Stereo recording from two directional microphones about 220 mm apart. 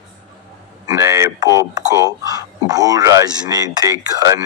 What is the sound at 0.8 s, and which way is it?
Speech, 10° right (ahead or behind).